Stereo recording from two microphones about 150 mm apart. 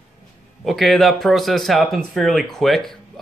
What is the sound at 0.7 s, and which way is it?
Speech, centre (ahead or behind).